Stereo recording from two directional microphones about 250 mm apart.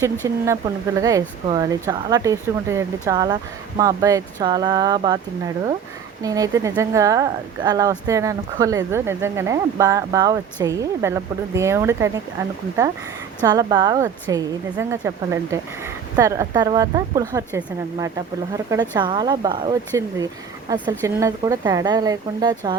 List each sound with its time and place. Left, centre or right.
0.4 s speech: centre
6.2 s speech: centre